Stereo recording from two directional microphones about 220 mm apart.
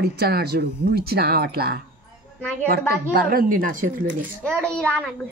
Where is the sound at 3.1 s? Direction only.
45° right (ahead or behind).